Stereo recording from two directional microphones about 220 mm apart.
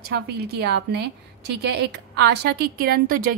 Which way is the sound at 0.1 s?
50° right (ahead or behind).